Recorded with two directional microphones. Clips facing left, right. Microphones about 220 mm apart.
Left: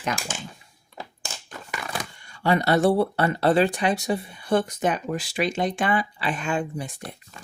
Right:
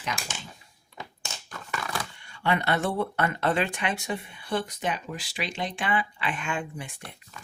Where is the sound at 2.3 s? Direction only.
40° left (ahead or behind).